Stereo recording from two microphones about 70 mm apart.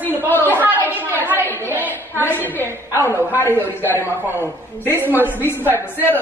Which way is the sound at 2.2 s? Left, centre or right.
Left.